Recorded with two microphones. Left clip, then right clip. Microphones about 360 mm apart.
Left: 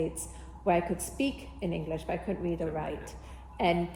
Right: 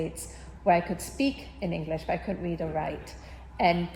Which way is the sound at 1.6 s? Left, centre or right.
Right.